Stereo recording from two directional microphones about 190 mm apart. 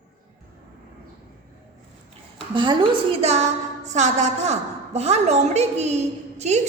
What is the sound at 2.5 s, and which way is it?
A woman's voice, 25° right (ahead or behind).